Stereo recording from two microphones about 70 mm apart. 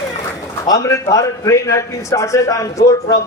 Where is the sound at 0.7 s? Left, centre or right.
Left.